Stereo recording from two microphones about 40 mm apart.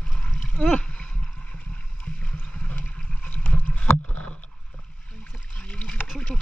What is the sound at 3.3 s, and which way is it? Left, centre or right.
Boat, left.